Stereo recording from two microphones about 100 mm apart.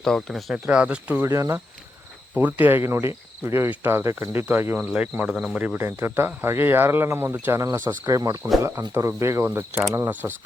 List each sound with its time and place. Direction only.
0.0 s speech: 5° left (ahead or behind)
0.5 s speech: 10° right (ahead or behind)
1.3 s speech: 35° right (ahead or behind)
2.3 s speech: 15° right (ahead or behind)